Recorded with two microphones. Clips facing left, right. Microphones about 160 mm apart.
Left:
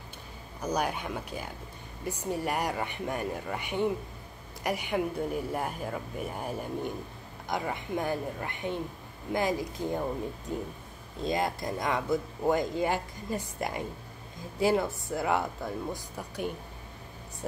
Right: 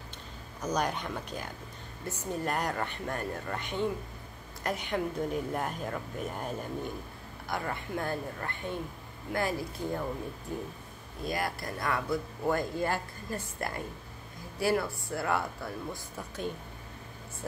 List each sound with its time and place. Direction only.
0.6 s speech: 10° left (ahead or behind)